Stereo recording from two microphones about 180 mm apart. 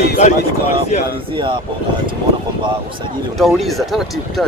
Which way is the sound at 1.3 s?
25° right (ahead or behind).